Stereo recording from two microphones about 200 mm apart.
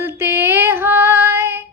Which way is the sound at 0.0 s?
10° right (ahead or behind).